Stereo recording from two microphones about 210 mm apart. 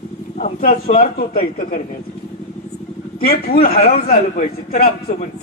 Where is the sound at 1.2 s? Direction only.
40° left (ahead or behind).